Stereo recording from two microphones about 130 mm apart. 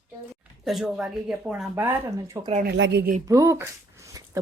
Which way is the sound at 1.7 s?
20° right (ahead or behind).